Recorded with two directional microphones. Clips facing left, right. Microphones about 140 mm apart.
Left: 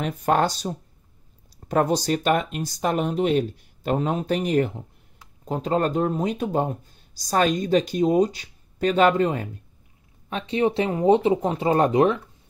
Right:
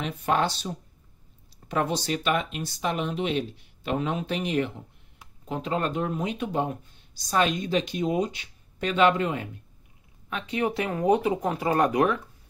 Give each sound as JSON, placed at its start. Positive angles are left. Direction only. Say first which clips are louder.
{"t": 0.0, "sound": "speech", "louder": "left 4 dB", "side_deg": 45}